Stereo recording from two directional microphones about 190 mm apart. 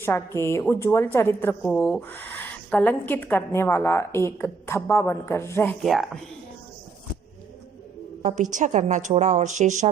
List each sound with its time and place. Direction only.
0.0 s speech: 15° left (ahead or behind)
5.8 s speech: centre (ahead or behind)
8.5 s a woman's voice: 40° right (ahead or behind)